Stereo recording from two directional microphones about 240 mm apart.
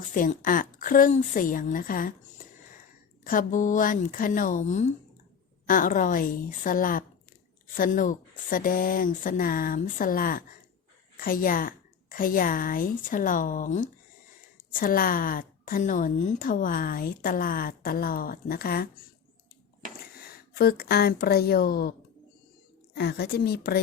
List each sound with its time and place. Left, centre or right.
0.1 s a woman's voice: left
20.1 s speech: left
23.0 s a woman's voice: left